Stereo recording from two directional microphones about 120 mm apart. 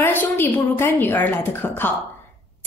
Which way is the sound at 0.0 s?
15° left (ahead or behind).